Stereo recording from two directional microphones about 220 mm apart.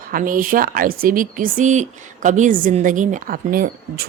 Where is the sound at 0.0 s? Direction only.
40° right (ahead or behind).